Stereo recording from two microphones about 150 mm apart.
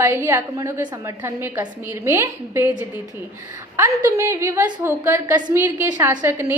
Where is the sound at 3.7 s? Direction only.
20° right (ahead or behind).